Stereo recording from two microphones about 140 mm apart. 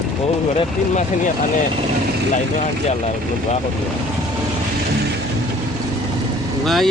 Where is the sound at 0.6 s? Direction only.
55° left (ahead or behind).